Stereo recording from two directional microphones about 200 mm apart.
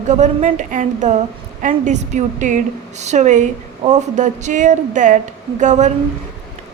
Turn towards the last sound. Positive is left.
turn(degrees=-35)  # may be behind; listen again after turning